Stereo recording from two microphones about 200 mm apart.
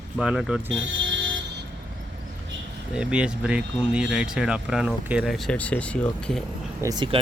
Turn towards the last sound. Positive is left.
turn(degrees=-20)  # may be behind; listen again after turning